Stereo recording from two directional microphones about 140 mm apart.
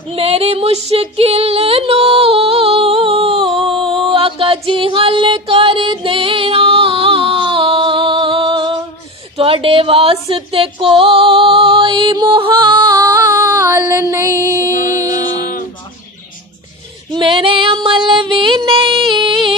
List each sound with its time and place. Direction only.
0.1 s female singing: 45° right (ahead or behind)
3.3 s a sound: centre (ahead or behind)
3.8 s music: centre (ahead or behind)
4.1 s music: 40° right (ahead or behind); by 14.7 s 20° right (ahead or behind)
14.7 s music: 70° left (ahead or behind)
17.1 s female singing: 35° right (ahead or behind)